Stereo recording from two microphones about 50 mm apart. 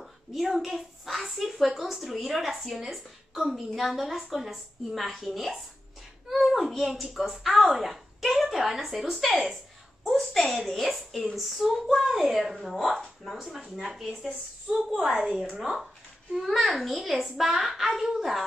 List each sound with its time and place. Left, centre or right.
0.0 s a woman's voice: centre
15.5 s speech: centre
16.3 s a woman's voice: centre